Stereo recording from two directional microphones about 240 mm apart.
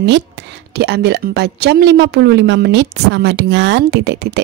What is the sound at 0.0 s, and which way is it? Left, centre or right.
A woman's voice, right.